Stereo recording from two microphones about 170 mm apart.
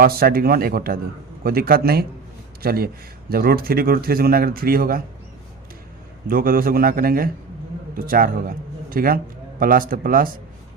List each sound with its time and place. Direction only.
0.0 s speech: 60° right (ahead or behind)
6.2 s a man's voice: 55° right (ahead or behind)